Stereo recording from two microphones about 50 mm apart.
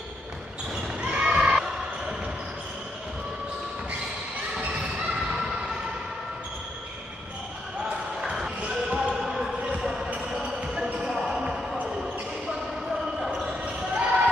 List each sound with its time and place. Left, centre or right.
1.0 s basketball bounce: right
4.6 s basketball bounce: centre
8.4 s basketball bounce: centre
10.6 s basketball bounce: centre
13.2 s basketball bounce: centre
13.5 s basketball bounce: right